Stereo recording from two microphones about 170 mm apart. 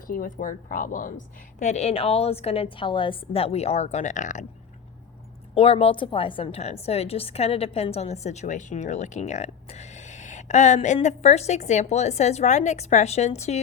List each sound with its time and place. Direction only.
0.1 s a woman's voice: 55° left (ahead or behind)
5.5 s a woman's voice: 35° left (ahead or behind)